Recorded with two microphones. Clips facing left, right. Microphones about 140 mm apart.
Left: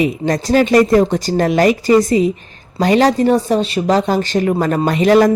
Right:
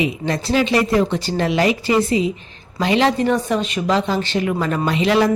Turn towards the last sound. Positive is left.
turn(degrees=45)  # may be behind; listen again after turning